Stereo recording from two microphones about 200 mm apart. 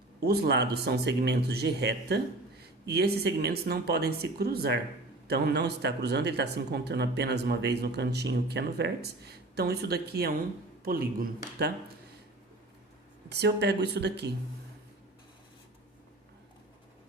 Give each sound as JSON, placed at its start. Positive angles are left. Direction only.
{"t": 0.3, "sound": "speech", "side_deg": -55}
{"t": 13.2, "sound": "speech", "side_deg": -55}